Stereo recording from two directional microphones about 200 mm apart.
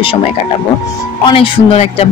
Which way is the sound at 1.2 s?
30° left (ahead or behind).